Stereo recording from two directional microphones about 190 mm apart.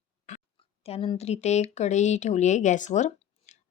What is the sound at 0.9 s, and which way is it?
A woman's voice, 30° left (ahead or behind).